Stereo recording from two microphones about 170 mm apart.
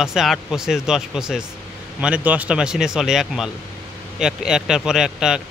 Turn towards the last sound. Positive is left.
turn(degrees=-5)  # may be behind; listen again after turning